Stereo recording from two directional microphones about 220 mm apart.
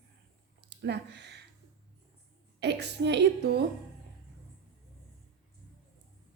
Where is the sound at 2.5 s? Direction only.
50° right (ahead or behind).